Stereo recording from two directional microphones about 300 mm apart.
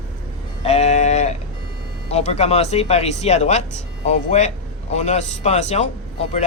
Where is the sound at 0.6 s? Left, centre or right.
Left.